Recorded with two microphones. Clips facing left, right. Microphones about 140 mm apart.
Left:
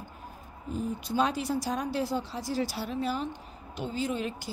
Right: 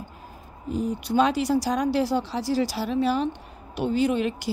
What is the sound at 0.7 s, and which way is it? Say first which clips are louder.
Speech: right 6 dB; 85° right.